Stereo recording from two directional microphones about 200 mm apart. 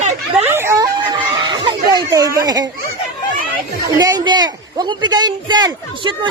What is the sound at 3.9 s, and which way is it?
A man's voice, 20° right (ahead or behind).